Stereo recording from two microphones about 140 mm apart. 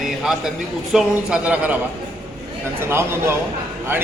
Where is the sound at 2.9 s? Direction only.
20° right (ahead or behind).